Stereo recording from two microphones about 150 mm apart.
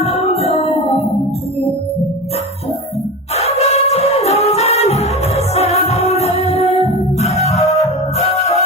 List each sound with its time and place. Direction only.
0.0 s music: 45° left (ahead or behind)
3.3 s music: 45° left (ahead or behind)